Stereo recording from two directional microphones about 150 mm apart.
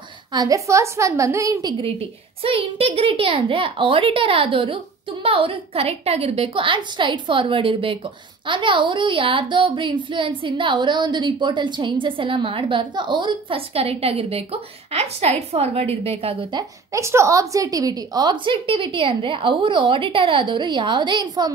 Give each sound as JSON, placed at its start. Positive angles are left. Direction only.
{"t": 0.3, "sound": "a woman's voice", "side_deg": -25}
{"t": 16.9, "sound": "a woman's voice", "side_deg": -20}